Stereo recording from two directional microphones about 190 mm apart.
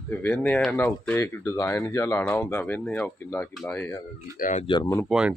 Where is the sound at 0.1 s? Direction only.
10° left (ahead or behind).